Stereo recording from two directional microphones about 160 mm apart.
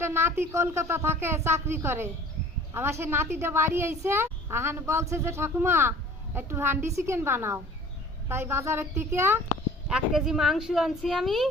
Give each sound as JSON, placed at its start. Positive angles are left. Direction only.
{"t": 0.0, "sound": "a woman's voice", "side_deg": -15}
{"t": 9.9, "sound": "speech", "side_deg": -5}